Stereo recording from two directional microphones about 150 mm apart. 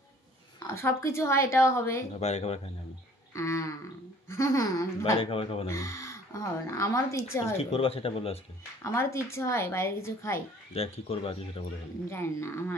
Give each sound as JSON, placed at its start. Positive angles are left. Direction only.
{"t": 0.7, "sound": "speech", "side_deg": 20}
{"t": 2.1, "sound": "speech", "side_deg": 45}
{"t": 3.3, "sound": "speech", "side_deg": 20}
{"t": 5.1, "sound": "speech", "side_deg": 40}
{"t": 5.7, "sound": "speech", "side_deg": 20}
{"t": 7.5, "sound": "speech", "side_deg": 40}
{"t": 8.8, "sound": "speech", "side_deg": 20}
{"t": 10.7, "sound": "speech", "side_deg": 40}
{"t": 12.1, "sound": "speech", "side_deg": 15}